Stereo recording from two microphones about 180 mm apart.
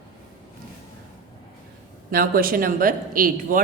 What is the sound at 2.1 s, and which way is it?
A man's voice, 55° right (ahead or behind).